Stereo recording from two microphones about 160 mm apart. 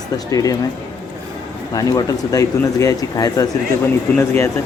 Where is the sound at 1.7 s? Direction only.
20° left (ahead or behind).